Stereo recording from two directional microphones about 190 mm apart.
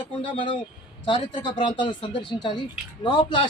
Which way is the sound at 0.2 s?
25° left (ahead or behind).